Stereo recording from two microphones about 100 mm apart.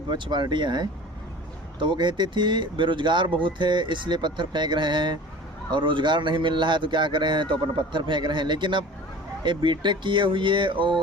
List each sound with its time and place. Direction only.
0.1 s speech: 50° right (ahead or behind)